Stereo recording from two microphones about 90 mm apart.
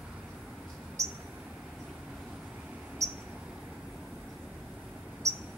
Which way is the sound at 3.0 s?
35° right (ahead or behind).